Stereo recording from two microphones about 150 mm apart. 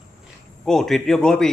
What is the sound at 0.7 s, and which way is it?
Speech, 5° left (ahead or behind).